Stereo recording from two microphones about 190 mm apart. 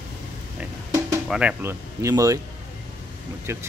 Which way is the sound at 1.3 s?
10° right (ahead or behind).